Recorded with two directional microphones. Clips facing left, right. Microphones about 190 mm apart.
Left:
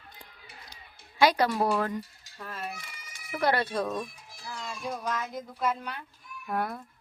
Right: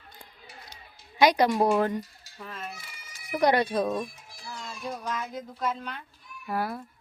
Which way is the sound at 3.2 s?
15° right (ahead or behind).